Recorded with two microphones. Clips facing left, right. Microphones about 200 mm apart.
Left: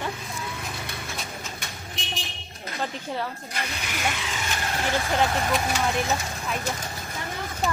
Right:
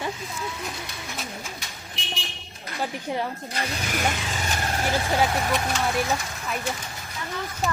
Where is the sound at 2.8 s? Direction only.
15° right (ahead or behind).